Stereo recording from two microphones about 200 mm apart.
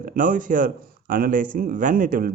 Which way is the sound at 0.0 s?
45° right (ahead or behind).